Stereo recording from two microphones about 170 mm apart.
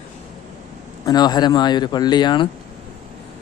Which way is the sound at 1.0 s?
25° left (ahead or behind).